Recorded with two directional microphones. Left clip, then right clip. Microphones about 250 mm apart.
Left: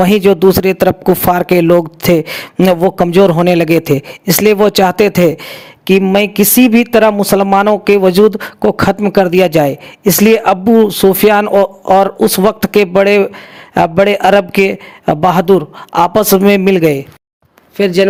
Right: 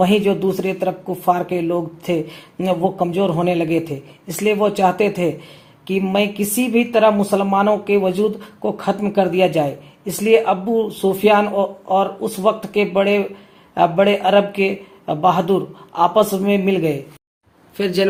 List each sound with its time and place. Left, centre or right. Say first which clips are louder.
0.0 s speech: left 8 dB; left
17.7 s speech: left 8 dB; left